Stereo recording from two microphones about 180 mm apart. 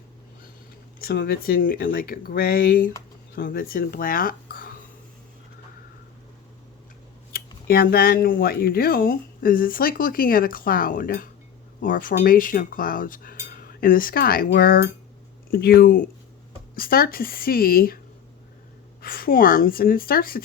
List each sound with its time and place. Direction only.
0.9 s speech: 55° left (ahead or behind)
7.3 s speech: 55° left (ahead or behind)
19.0 s speech: 55° left (ahead or behind)